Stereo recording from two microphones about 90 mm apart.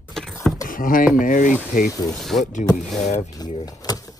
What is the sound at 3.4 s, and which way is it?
Speech, 45° left (ahead or behind).